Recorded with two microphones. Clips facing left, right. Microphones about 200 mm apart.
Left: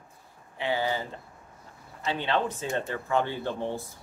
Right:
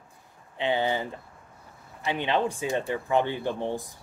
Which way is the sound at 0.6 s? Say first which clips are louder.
Right 2 dB; 20° right (ahead or behind).